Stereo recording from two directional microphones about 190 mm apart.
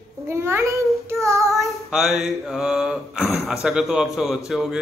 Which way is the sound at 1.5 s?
Centre (ahead or behind).